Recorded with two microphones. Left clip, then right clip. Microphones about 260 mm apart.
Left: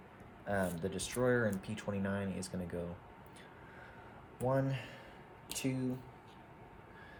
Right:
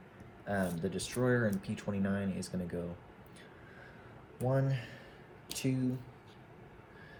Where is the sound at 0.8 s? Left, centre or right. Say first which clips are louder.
Even; left.